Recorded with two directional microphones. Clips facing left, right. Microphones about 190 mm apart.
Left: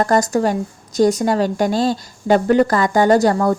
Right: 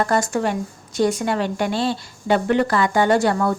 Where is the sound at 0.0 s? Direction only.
40° left (ahead or behind).